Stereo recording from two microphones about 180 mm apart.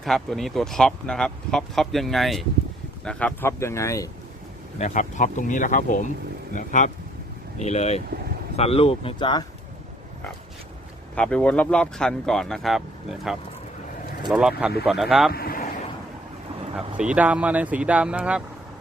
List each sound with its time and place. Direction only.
0.0 s speech: centre (ahead or behind); by 4.1 s 15° left (ahead or behind)
4.8 s speech: 45° left (ahead or behind); by 9.4 s 25° left (ahead or behind)
11.1 s speech: 5° left (ahead or behind)
15.3 s speech: 55° left (ahead or behind)
16.7 s speech: 5° right (ahead or behind)